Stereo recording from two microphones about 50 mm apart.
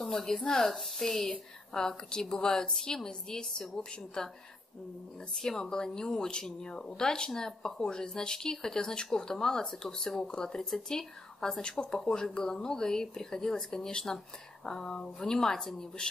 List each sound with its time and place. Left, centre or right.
0.0 s speech: centre
5.3 s speech: centre